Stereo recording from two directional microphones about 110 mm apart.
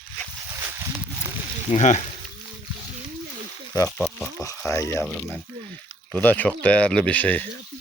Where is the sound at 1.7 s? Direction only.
90° left.